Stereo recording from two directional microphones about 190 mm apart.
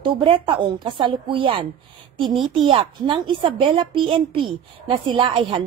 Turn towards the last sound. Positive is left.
turn(degrees=-25)  # may be behind; listen again after turning